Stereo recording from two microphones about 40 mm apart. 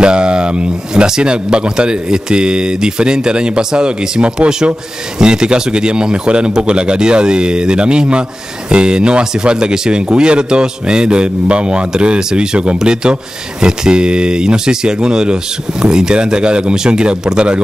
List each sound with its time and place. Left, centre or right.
0.0 s speech: right